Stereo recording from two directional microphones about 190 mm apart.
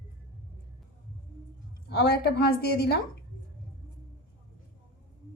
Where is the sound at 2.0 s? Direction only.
60° left (ahead or behind).